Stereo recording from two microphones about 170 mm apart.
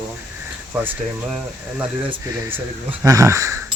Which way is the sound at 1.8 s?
10° right (ahead or behind).